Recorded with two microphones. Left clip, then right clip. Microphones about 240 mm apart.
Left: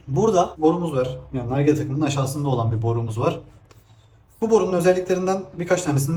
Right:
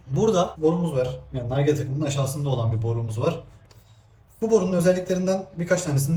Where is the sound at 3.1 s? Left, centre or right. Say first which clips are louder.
Left 2 dB; centre.